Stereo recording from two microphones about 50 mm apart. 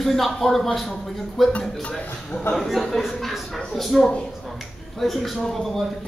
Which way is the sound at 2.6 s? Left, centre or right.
Centre.